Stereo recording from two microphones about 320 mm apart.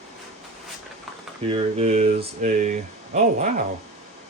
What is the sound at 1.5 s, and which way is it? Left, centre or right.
Speech, centre.